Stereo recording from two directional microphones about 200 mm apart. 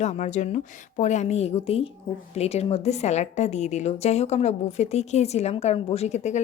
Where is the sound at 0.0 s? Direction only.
35° left (ahead or behind).